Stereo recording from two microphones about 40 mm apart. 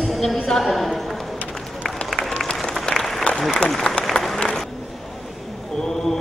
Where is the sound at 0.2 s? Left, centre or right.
Centre.